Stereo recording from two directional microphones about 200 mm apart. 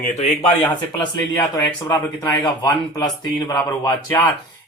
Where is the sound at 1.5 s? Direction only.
15° left (ahead or behind).